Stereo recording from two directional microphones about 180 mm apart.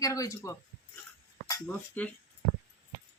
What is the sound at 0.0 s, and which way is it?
Speech, 20° left (ahead or behind).